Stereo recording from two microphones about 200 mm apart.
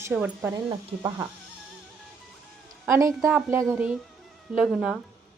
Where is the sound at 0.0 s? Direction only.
10° right (ahead or behind).